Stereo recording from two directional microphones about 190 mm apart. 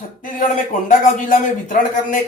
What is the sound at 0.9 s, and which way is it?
Speech, 45° left (ahead or behind).